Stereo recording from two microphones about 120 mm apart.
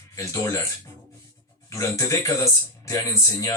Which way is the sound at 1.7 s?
25° left (ahead or behind).